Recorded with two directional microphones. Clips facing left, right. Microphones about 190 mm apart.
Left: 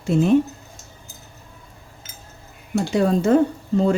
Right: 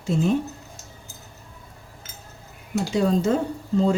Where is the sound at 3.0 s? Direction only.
60° left (ahead or behind).